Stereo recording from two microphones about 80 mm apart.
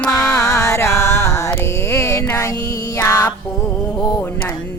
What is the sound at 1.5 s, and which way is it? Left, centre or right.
Mantra, left.